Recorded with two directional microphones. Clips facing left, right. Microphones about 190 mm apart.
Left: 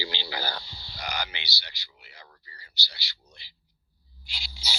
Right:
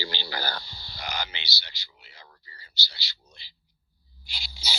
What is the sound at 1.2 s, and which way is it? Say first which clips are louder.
Speech: left 1 dB; 20° right (ahead or behind).